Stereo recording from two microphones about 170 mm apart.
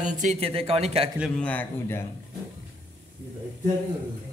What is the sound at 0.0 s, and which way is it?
Speech, 45° right (ahead or behind).